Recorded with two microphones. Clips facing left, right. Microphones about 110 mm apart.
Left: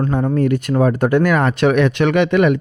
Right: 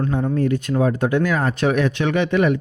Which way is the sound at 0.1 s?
60° left (ahead or behind).